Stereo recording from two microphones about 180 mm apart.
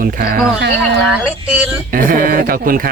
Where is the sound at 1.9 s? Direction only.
50° right (ahead or behind).